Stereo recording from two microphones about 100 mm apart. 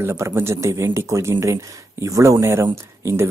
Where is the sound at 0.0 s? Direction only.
25° right (ahead or behind).